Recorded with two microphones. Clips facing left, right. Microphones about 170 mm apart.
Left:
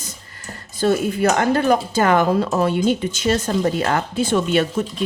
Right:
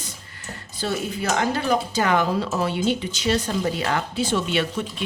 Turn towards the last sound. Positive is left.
turn(degrees=45)  # may be behind; listen again after turning